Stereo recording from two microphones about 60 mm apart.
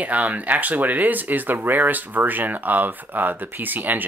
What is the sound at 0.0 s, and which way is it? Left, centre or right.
Speech, right.